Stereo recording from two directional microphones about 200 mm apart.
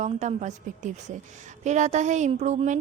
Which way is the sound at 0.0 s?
35° right (ahead or behind).